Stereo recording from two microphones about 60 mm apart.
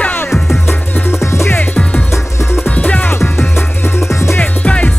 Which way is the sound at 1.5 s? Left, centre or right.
Left.